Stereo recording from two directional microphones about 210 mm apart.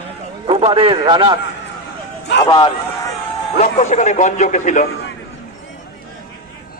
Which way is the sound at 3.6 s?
35° left (ahead or behind).